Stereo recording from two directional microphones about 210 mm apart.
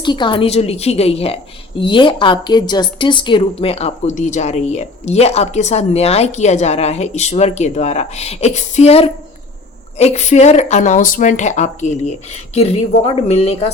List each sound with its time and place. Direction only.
0.0 s a woman's voice: 20° left (ahead or behind)